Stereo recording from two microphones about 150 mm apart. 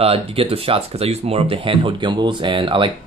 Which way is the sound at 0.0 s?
40° right (ahead or behind).